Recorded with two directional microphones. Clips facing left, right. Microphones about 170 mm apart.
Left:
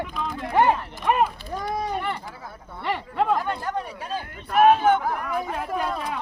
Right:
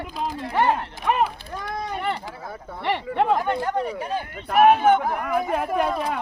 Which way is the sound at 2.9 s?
25° right (ahead or behind).